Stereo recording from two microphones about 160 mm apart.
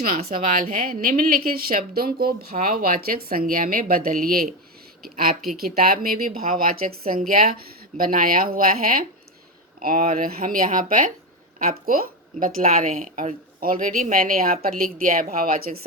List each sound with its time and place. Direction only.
0.0 s a woman's voice: 65° right (ahead or behind)